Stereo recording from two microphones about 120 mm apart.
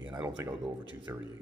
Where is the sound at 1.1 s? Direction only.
20° right (ahead or behind).